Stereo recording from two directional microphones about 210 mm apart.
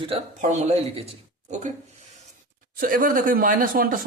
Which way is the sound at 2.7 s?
40° right (ahead or behind).